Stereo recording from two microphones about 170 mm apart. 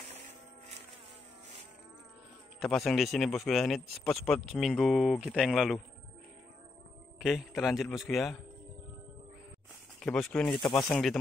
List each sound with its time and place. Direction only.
2.6 s speech: centre (ahead or behind)
7.2 s speech: centre (ahead or behind)
9.9 s speech: 5° left (ahead or behind)
10.6 s speech: 25° left (ahead or behind)
10.9 s speech: centre (ahead or behind)